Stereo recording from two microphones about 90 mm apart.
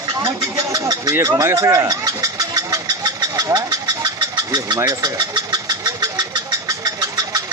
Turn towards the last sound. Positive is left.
turn(degrees=-45)  # may be behind; listen again after turning